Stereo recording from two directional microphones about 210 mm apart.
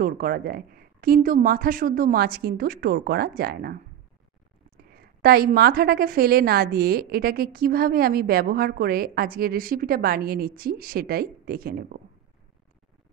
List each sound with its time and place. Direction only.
0.0 s a woman's voice: 45° right (ahead or behind)
4.9 s a woman's voice: 45° right (ahead or behind)